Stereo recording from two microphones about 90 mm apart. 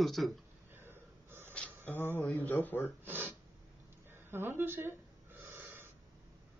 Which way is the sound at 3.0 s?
20° right (ahead or behind).